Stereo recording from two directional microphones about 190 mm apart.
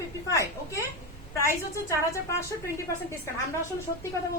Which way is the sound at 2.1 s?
15° left (ahead or behind).